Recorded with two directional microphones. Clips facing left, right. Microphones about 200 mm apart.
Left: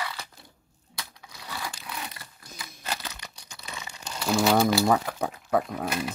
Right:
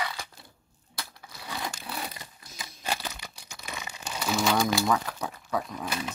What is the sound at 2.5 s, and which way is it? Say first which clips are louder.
Crumpling: right 2 dB; 15° right (ahead or behind).